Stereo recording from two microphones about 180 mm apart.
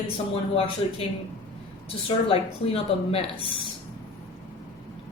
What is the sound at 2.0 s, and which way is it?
A woman's voice, 35° left (ahead or behind).